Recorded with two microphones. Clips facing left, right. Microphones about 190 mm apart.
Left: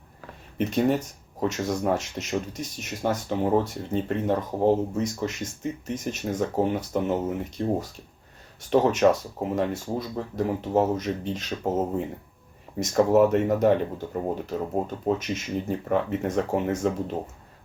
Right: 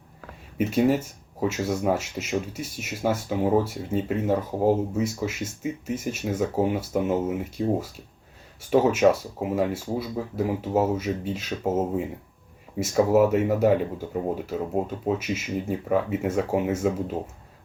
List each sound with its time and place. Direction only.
0.6 s speech: 5° right (ahead or behind)
12.8 s speech: 5° right (ahead or behind)